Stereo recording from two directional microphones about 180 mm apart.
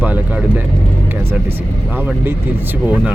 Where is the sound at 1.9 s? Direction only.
10° right (ahead or behind).